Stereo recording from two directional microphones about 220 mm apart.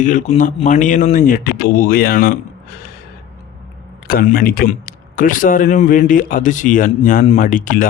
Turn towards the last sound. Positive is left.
turn(degrees=35)  # may be behind; listen again after turning